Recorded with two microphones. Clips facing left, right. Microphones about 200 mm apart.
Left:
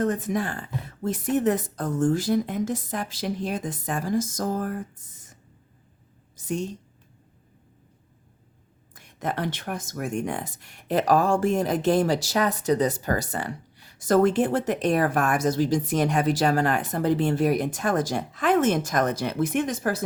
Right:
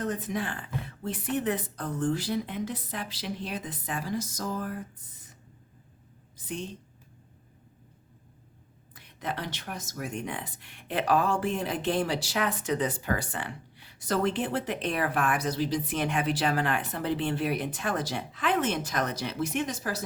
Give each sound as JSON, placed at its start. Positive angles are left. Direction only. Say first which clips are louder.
{"t": 0.0, "sound": "speech", "louder": "left 6 dB", "side_deg": 50}
{"t": 6.3, "sound": "a woman's voice", "louder": "left 7 dB", "side_deg": 45}
{"t": 9.0, "sound": "speech", "louder": "left 6 dB", "side_deg": 50}